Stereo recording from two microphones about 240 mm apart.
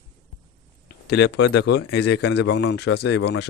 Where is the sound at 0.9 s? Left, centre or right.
Left.